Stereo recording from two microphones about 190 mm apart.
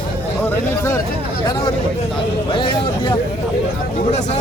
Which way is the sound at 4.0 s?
35° left (ahead or behind).